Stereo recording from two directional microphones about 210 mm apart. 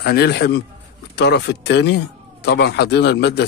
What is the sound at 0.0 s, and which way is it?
Speech, 50° left (ahead or behind).